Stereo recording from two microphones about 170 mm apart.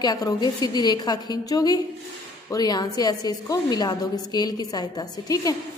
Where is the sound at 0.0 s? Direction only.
25° left (ahead or behind).